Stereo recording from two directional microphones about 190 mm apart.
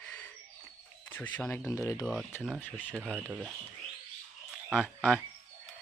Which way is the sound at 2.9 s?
10° right (ahead or behind).